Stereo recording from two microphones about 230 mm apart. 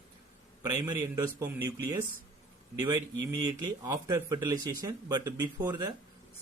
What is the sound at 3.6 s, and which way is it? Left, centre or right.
Speech, centre.